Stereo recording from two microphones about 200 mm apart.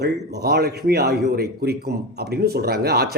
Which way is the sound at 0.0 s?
55° right (ahead or behind).